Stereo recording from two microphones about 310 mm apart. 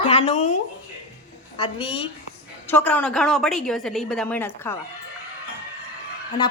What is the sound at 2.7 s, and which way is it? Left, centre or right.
A woman's voice, centre.